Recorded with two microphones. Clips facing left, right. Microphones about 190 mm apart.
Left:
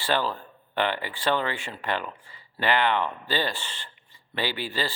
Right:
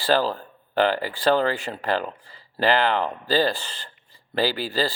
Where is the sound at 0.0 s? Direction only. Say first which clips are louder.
Right 5 dB; 35° right (ahead or behind).